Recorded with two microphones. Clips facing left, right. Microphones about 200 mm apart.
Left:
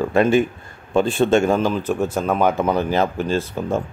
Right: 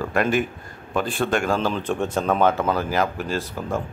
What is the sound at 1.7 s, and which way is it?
Speech, 5° left (ahead or behind).